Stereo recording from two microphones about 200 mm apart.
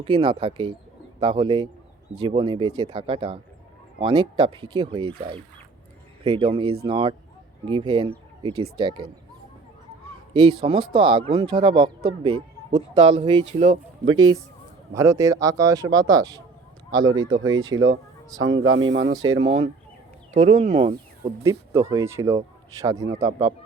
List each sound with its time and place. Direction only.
0.0 s speech: 25° right (ahead or behind)
6.2 s speech: 30° right (ahead or behind)
10.3 s speech: 30° right (ahead or behind)
13.5 s speech: 40° right (ahead or behind)
14.9 s speech: 15° right (ahead or behind)
18.4 s speech: 75° right (ahead or behind); by 19.2 s 60° right (ahead or behind)
19.2 s speech: 90° right
20.3 s speech: 30° right (ahead or behind)
21.4 s speech: 15° right (ahead or behind)